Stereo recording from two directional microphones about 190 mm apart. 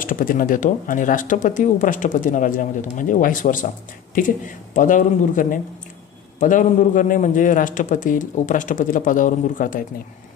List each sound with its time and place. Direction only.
0.0 s speech: 45° left (ahead or behind)